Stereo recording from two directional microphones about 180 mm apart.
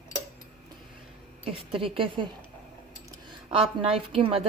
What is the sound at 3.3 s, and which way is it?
A woman's voice, 30° right (ahead or behind).